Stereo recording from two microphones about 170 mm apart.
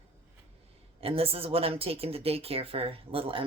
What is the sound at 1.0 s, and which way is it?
A woman's voice, 35° right (ahead or behind).